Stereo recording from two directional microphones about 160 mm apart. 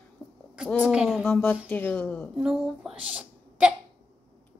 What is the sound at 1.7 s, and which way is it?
Speech, 10° left (ahead or behind).